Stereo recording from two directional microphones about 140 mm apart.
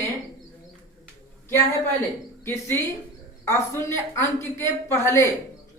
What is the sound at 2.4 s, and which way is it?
A woman's voice, 20° left (ahead or behind).